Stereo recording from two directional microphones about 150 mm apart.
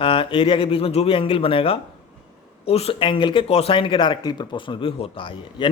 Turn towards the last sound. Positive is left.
turn(degrees=35)  # may be behind; listen again after turning